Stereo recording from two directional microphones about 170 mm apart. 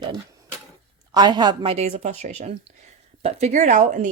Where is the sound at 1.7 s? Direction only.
40° right (ahead or behind).